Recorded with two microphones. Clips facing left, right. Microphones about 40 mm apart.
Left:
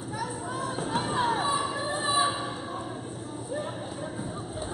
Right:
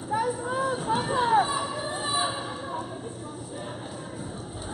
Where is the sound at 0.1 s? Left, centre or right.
Right.